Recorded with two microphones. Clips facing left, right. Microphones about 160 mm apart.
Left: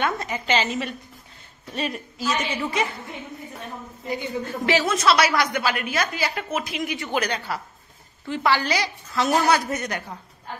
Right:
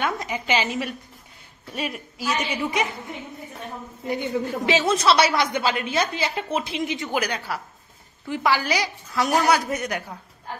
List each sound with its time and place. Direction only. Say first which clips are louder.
0.0 s a woman's voice: left 1 dB; 10° right (ahead or behind)
4.5 s a woman's voice: left 2 dB; 20° right (ahead or behind)
4.8 s a woman's voice: right 3 dB; 30° right (ahead or behind)
7.1 s a woman's voice: even; 10° right (ahead or behind)